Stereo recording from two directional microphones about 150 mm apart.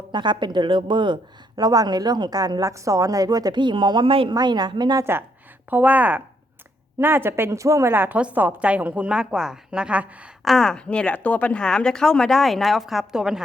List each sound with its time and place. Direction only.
0.1 s a woman's voice: 30° right (ahead or behind)
5.7 s a woman's voice: 10° right (ahead or behind)